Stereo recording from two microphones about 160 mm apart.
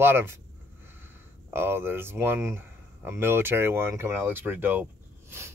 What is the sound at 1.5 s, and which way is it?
Speech, 15° right (ahead or behind).